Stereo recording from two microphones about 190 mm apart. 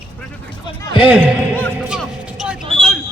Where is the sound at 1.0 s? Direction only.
5° right (ahead or behind).